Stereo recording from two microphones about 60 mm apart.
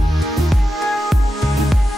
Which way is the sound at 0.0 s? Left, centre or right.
Centre.